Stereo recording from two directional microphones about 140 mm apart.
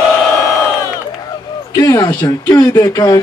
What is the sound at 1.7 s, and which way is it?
Speech, 25° left (ahead or behind).